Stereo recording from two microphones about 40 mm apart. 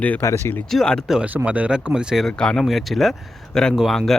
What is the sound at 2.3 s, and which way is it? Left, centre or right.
Speech, left.